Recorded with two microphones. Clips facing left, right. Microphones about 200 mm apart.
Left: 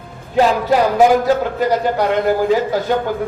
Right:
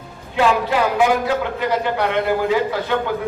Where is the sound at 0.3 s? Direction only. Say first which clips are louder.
Left 4 dB; 40° left (ahead or behind).